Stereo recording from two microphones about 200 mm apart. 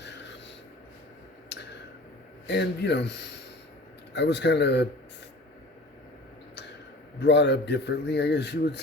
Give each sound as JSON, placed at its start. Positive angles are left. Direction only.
{"t": 0.0, "sound": "rub", "side_deg": 60}
{"t": 1.5, "sound": "a sound", "side_deg": 60}
{"t": 2.5, "sound": "speech", "side_deg": 60}
{"t": 7.2, "sound": "speech", "side_deg": 60}